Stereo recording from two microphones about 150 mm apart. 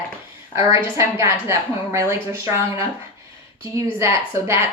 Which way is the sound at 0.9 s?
20° right (ahead or behind).